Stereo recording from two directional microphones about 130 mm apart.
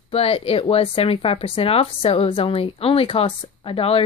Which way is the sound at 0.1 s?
50° left (ahead or behind).